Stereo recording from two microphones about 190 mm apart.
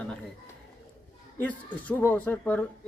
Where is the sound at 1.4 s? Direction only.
10° left (ahead or behind).